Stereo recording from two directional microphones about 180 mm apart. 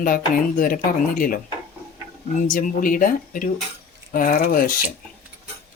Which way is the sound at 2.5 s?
50° left (ahead or behind).